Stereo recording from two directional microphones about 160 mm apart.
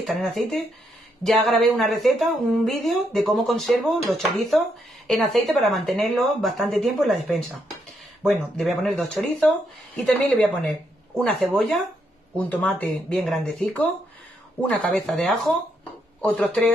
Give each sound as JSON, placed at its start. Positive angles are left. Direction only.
{"t": 0.0, "sound": "speech", "side_deg": 0}